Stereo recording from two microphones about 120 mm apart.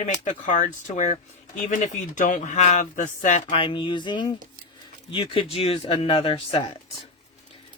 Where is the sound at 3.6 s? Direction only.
45° left (ahead or behind).